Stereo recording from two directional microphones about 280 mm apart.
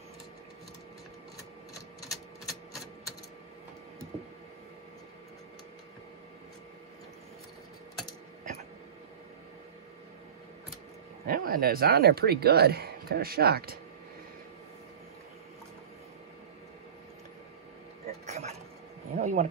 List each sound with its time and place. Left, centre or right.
2.0 s typewriter: centre
11.2 s speech: right
18.2 s a sound: right